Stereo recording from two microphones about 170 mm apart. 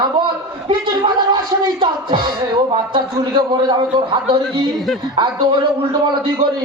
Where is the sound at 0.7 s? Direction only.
30° right (ahead or behind).